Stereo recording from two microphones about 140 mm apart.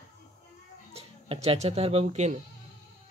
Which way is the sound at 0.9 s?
45° right (ahead or behind).